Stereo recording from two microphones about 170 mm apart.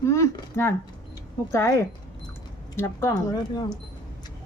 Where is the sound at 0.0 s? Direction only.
15° left (ahead or behind).